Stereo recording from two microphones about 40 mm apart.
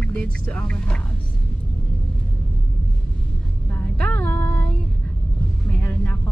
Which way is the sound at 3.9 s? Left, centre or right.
Left.